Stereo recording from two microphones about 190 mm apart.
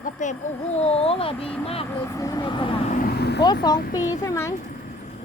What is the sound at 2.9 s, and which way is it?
Vehicle, 50° left (ahead or behind).